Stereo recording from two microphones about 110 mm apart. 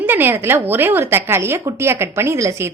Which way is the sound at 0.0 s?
20° right (ahead or behind).